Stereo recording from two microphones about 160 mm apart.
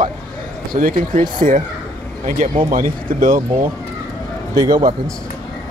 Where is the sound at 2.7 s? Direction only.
60° right (ahead or behind).